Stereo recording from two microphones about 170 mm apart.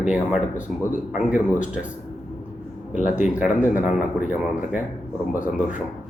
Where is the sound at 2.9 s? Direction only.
45° left (ahead or behind).